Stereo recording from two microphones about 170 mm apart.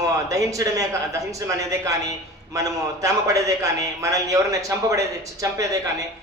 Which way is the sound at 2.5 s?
20° right (ahead or behind).